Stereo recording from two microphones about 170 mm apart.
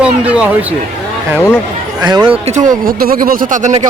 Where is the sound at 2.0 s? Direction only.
25° right (ahead or behind).